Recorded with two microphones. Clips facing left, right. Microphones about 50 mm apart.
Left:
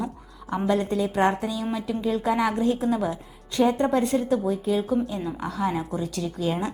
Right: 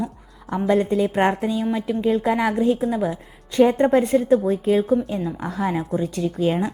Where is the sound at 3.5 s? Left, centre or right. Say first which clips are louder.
Right 5 dB; right.